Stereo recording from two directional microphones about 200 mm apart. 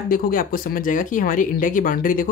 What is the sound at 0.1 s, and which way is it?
Speech, 45° left (ahead or behind).